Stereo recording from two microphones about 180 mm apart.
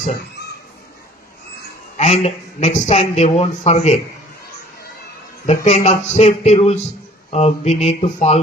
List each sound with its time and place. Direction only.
2.0 s speech: 35° left (ahead or behind)
5.5 s speech: 40° left (ahead or behind)